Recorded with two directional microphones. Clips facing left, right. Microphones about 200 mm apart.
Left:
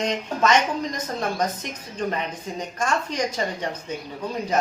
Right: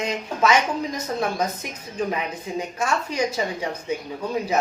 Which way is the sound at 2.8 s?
10° right (ahead or behind).